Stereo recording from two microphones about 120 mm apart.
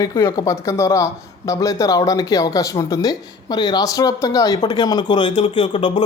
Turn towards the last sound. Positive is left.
turn(degrees=45)  # may be behind; listen again after turning